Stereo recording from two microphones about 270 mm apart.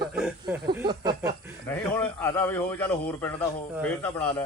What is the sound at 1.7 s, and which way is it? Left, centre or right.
A man's voice, centre.